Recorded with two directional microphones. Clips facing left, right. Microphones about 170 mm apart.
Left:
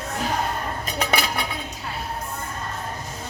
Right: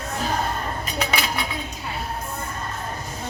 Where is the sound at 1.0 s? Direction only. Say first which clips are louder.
Left 1 dB; 55° left (ahead or behind).